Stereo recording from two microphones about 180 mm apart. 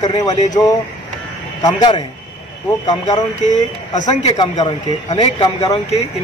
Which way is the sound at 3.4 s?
40° left (ahead or behind).